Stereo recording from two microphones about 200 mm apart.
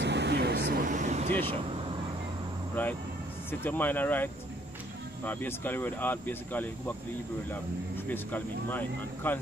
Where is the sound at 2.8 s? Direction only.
10° left (ahead or behind).